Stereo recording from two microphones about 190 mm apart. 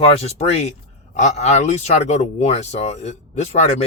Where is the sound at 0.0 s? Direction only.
30° left (ahead or behind).